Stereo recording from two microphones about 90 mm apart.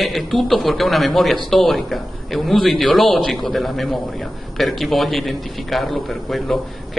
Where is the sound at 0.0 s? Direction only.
Centre (ahead or behind).